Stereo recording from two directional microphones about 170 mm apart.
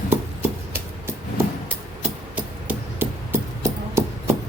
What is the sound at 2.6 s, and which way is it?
Hammer, 10° right (ahead or behind).